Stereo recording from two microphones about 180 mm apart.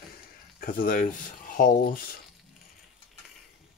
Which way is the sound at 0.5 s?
50° left (ahead or behind).